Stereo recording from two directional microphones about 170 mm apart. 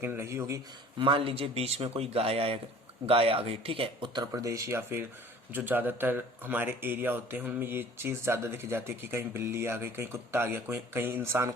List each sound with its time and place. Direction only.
0.0 s speech: 15° right (ahead or behind)
0.9 s speech: 30° right (ahead or behind); by 11.5 s 15° right (ahead or behind)